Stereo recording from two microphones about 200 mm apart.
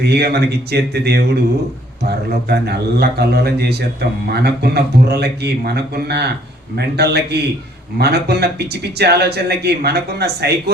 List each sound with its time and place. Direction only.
0.0 s a man's voice: 55° right (ahead or behind)